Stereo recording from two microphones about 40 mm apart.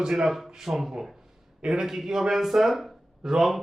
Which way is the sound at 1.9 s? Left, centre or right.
Centre.